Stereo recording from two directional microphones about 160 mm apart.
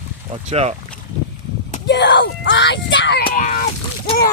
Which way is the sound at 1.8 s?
90° left.